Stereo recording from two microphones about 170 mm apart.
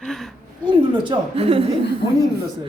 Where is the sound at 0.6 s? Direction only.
30° right (ahead or behind).